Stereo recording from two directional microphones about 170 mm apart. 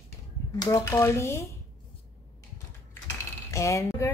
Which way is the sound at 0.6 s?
15° left (ahead or behind).